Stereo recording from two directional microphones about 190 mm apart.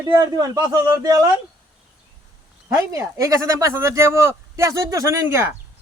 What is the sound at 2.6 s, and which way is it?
Speech, 15° right (ahead or behind).